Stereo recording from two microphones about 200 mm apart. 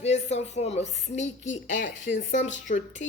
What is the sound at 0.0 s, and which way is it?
A woman's voice, 35° left (ahead or behind).